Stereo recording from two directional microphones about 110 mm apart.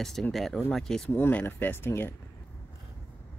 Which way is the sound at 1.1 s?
20° left (ahead or behind).